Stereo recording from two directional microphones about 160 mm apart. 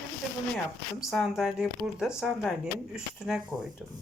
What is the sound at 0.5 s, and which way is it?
Speech, centre (ahead or behind).